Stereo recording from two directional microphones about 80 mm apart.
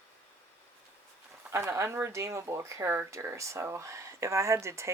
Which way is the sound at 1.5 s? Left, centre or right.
Right.